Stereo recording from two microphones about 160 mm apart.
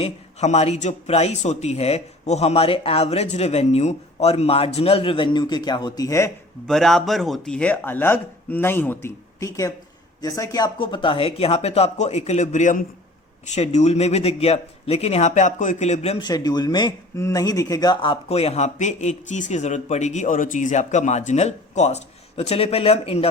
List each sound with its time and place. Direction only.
0.0 s speech: 45° left (ahead or behind); by 6.3 s 20° left (ahead or behind)
6.7 s speech: centre (ahead or behind); by 16.2 s 45° left (ahead or behind)
16.2 s speech: 25° left (ahead or behind)